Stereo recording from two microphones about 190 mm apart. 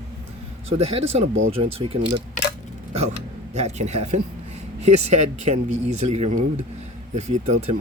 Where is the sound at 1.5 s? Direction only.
30° right (ahead or behind).